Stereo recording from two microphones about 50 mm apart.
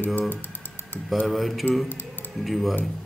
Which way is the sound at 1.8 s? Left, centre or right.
Left.